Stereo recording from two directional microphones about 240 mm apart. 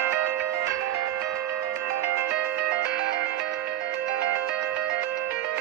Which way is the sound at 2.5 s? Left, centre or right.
Right.